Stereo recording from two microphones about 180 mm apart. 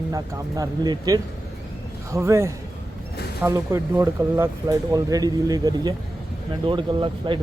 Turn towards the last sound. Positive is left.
turn(degrees=-30)  # may be behind; listen again after turning